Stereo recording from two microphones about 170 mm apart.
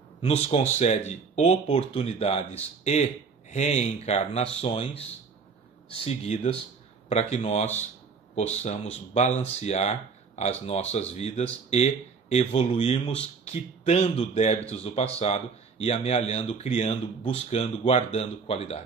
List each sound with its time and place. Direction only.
0.2 s speech: 35° left (ahead or behind)